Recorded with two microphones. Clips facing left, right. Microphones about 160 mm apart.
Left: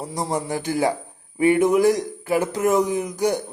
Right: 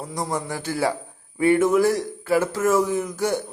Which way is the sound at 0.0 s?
25° left (ahead or behind).